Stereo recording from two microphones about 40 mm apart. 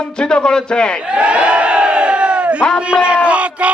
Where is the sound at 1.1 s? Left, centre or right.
Right.